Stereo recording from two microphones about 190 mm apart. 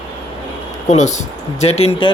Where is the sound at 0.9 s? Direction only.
40° left (ahead or behind).